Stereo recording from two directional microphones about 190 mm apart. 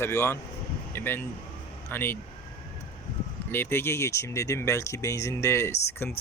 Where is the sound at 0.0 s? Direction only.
15° left (ahead or behind).